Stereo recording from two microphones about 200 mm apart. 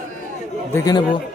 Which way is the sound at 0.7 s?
15° left (ahead or behind).